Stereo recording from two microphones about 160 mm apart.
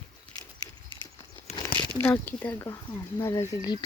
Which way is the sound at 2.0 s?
10° left (ahead or behind).